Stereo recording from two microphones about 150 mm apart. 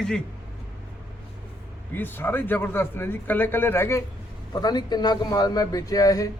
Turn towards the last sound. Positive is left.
turn(degrees=25)  # may be behind; listen again after turning